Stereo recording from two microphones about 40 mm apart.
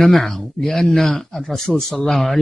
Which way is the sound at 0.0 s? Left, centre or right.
Centre.